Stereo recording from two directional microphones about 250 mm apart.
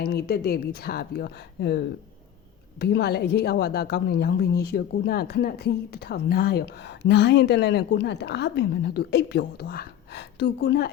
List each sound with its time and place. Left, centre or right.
0.0 s a woman's voice: left